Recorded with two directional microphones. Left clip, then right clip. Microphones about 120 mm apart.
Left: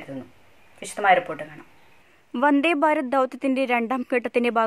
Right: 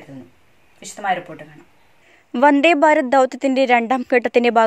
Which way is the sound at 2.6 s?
25° right (ahead or behind).